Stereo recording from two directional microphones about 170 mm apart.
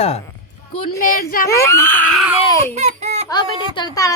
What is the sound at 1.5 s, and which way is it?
A child's voice, 15° left (ahead or behind).